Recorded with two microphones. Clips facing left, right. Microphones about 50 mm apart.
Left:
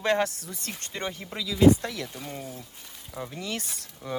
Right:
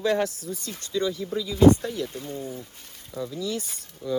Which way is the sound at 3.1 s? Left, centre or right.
Left.